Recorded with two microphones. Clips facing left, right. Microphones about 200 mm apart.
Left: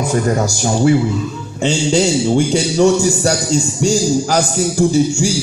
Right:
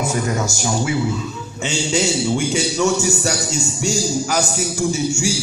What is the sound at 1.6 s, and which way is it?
A man's voice, 30° left (ahead or behind).